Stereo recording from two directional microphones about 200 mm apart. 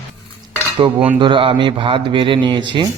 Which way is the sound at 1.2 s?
25° right (ahead or behind).